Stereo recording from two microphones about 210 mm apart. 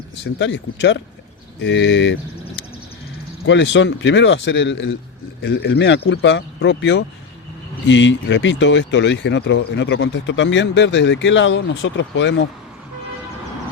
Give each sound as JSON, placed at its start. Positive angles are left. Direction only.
{"t": 0.3, "sound": "speech", "side_deg": 55}
{"t": 3.4, "sound": "speech", "side_deg": 60}